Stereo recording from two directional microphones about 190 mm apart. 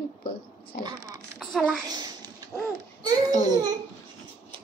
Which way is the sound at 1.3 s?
5° left (ahead or behind).